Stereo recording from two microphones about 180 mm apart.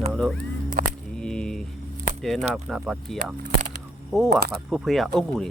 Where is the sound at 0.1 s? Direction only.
Centre (ahead or behind).